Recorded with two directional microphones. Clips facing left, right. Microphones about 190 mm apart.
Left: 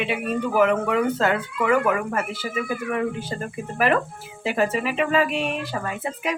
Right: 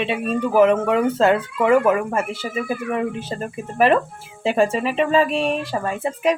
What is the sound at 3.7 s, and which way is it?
Speech, 25° right (ahead or behind).